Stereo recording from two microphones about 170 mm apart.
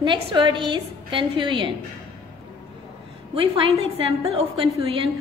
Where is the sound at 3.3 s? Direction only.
30° right (ahead or behind).